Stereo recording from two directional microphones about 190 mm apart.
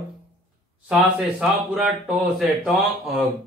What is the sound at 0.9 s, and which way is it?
Speech, 10° right (ahead or behind).